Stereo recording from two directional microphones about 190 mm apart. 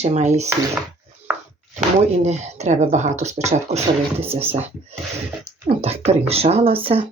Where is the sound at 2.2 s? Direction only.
35° right (ahead or behind).